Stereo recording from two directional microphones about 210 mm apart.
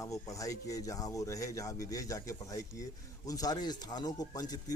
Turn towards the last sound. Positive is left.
turn(degrees=20)  # may be behind; listen again after turning